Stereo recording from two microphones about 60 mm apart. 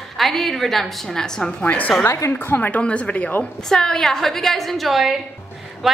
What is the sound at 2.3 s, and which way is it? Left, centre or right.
Speech, left.